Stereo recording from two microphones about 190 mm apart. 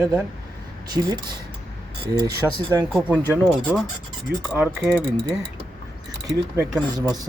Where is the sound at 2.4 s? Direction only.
5° right (ahead or behind).